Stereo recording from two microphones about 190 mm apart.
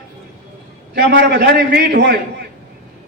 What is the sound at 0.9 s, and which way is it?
A man's voice, 55° right (ahead or behind).